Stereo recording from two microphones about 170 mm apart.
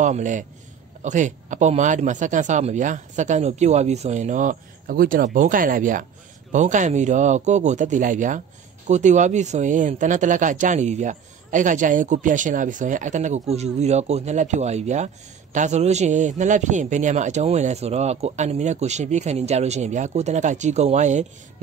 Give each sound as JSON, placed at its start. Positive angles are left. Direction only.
{"t": 0.0, "sound": "a man's voice", "side_deg": -45}